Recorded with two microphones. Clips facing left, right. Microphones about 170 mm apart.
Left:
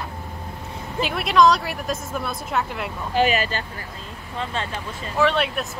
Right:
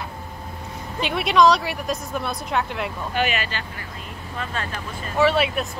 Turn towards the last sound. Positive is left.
turn(degrees=-5)  # may be behind; listen again after turning